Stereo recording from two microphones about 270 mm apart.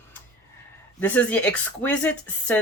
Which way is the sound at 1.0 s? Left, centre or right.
Centre.